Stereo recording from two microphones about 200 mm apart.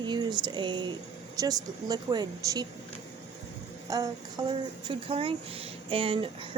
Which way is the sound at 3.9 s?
20° right (ahead or behind).